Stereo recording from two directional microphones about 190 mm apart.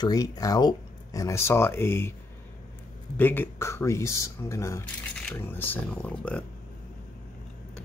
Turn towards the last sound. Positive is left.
turn(degrees=5)  # may be behind; listen again after turning